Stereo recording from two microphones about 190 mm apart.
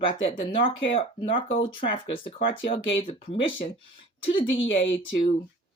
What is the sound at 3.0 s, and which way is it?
Speech, 25° left (ahead or behind).